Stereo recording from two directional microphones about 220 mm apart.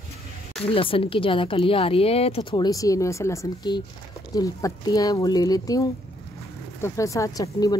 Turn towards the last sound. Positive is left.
turn(degrees=15)  # may be behind; listen again after turning